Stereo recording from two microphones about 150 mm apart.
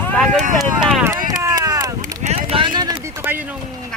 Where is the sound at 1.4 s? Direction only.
25° right (ahead or behind).